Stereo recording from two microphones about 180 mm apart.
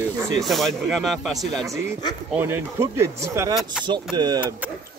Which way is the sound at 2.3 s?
15° right (ahead or behind).